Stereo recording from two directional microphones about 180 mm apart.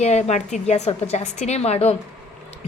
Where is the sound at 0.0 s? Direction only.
40° left (ahead or behind).